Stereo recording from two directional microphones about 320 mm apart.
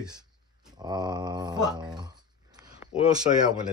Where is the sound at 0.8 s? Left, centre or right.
Centre.